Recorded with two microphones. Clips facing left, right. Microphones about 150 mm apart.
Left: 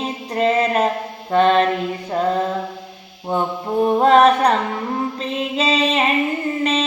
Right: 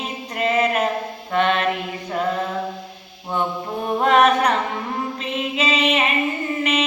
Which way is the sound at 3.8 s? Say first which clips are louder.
Left 3 dB; 30° left (ahead or behind).